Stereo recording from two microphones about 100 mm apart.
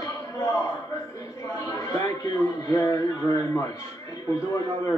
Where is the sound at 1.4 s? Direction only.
30° left (ahead or behind).